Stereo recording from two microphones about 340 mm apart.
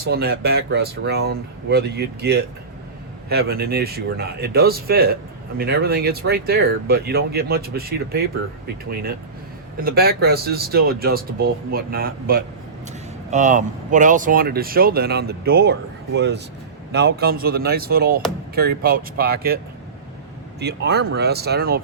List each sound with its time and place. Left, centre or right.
0.0 s speech: right
20.6 s speech: right